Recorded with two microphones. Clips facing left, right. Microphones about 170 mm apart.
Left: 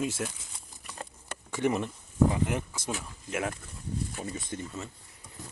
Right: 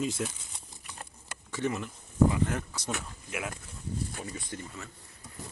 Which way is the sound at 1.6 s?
20° left (ahead or behind).